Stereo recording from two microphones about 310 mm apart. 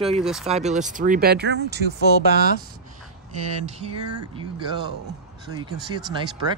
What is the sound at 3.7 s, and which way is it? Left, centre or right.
Speech, centre.